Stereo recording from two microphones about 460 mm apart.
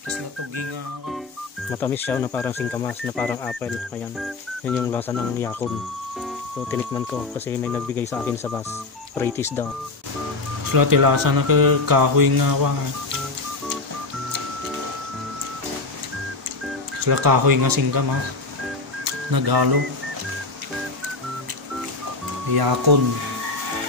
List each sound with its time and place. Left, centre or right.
1.7 s speech: centre
6.7 s speech: centre
10.6 s speech: right
17.0 s speech: right
19.3 s speech: right
22.5 s speech: right